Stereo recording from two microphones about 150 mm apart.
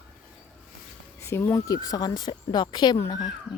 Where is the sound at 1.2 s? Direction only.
15° left (ahead or behind).